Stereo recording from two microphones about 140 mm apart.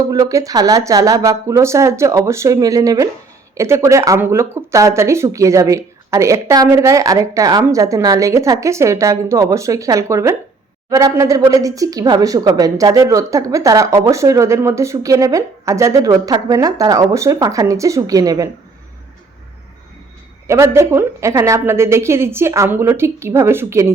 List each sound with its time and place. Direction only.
0.1 s speech: 25° right (ahead or behind)
20.5 s speech: 20° right (ahead or behind)